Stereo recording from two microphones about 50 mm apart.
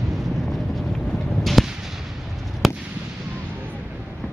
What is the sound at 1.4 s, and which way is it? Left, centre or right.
Artillery fire, centre.